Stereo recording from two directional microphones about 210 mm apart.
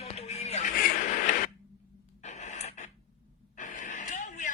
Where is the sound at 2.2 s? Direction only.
35° left (ahead or behind).